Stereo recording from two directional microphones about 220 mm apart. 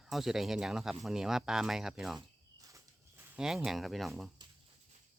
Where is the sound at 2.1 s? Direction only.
15° right (ahead or behind).